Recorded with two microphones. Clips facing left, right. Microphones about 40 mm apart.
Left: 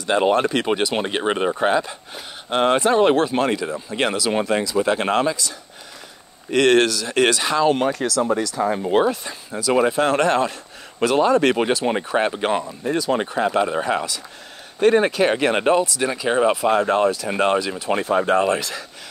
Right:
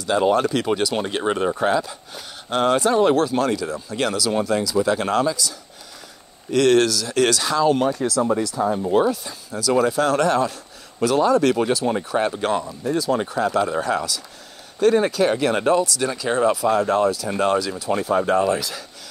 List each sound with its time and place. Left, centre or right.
0.0 s speech: left
6.5 s speech: left
7.6 s speech: left
9.0 s speech: left
9.5 s speech: left
12.9 s speech: left